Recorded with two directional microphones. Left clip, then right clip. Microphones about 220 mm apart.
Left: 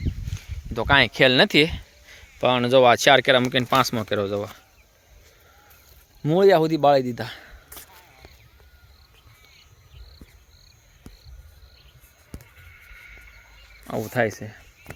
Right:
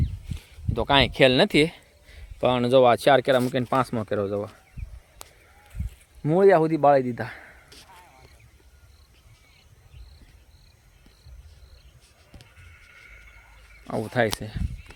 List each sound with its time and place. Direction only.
0.3 s speech: 5° right (ahead or behind)
6.2 s speech: 5° left (ahead or behind)
12.7 s neigh: 55° right (ahead or behind)
13.8 s speech: centre (ahead or behind)